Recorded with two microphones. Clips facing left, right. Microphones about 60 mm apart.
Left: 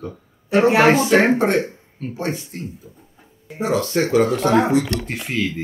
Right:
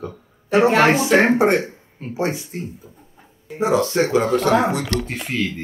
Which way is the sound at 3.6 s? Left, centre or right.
Centre.